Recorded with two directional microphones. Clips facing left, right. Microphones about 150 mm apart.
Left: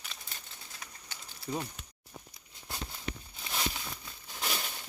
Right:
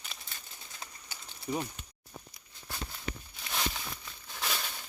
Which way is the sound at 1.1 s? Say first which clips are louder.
Right 2 dB; 10° right (ahead or behind).